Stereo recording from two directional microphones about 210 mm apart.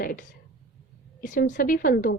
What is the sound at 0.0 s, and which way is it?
A woman's voice, 45° left (ahead or behind).